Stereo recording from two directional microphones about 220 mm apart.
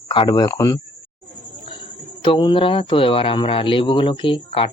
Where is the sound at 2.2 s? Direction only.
20° left (ahead or behind).